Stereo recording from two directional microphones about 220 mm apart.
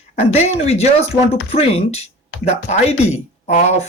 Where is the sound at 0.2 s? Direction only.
30° left (ahead or behind).